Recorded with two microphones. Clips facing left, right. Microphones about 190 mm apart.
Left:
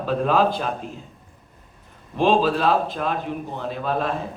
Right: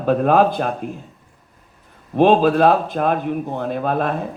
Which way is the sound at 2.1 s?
50° right (ahead or behind).